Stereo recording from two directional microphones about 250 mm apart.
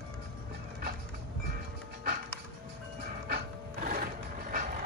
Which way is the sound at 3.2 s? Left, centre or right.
Right.